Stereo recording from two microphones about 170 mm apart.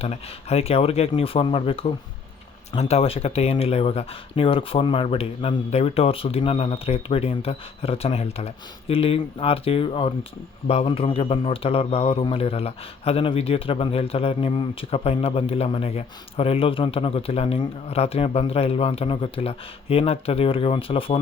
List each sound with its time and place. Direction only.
0.0 s a man's voice: 35° left (ahead or behind)